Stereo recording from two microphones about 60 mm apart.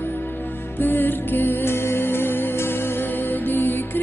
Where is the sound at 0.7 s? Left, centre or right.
Left.